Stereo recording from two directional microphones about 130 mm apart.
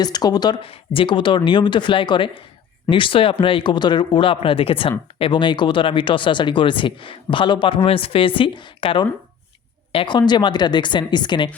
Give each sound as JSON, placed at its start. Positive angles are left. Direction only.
{"t": 0.0, "sound": "speech", "side_deg": 30}
{"t": 0.6, "sound": "speech", "side_deg": 45}